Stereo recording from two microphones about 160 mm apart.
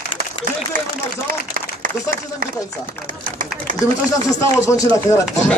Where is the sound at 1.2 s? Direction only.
60° right (ahead or behind).